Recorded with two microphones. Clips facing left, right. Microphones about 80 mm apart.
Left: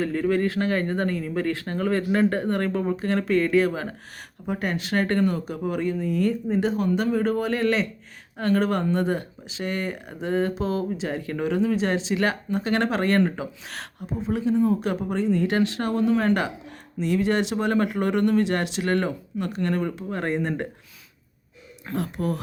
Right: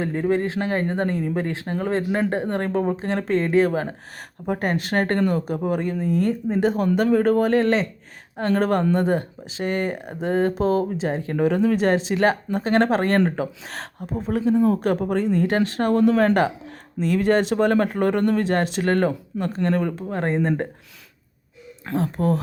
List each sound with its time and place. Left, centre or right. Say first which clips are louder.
0.0 s speech: right 1 dB; right
11.6 s speech: right 4 dB; right
17.0 s speech: right 3 dB; right
21.9 s speech: right 5 dB; right